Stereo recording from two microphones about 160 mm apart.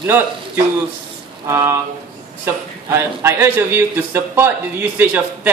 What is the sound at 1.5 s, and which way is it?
A man's voice, 20° right (ahead or behind).